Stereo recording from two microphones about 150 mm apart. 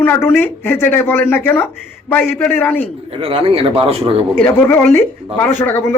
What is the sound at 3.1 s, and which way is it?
Speech, 35° right (ahead or behind).